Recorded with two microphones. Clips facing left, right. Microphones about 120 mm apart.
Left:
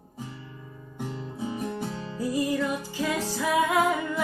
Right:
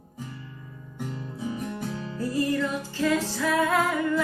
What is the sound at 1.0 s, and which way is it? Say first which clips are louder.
Music: even; 25° left (ahead or behind).